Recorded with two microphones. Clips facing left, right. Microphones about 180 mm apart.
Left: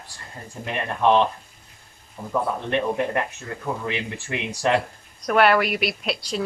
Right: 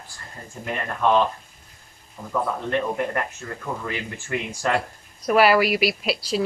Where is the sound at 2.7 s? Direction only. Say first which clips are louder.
Left 1 dB; 20° left (ahead or behind).